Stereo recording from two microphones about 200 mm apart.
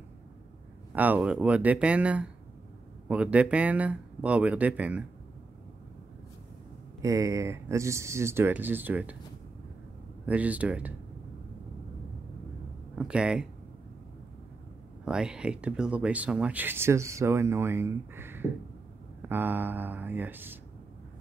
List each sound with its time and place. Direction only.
0.9 s speech: 10° right (ahead or behind)
7.0 s speech: 15° right (ahead or behind)
10.2 s speech: 5° right (ahead or behind)
12.9 s speech: 5° right (ahead or behind)
15.0 s speech: 5° right (ahead or behind)